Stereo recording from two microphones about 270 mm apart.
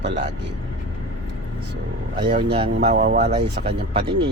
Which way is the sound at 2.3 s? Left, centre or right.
Right.